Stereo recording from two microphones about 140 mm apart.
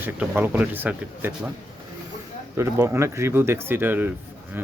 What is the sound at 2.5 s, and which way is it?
Speech, 20° right (ahead or behind).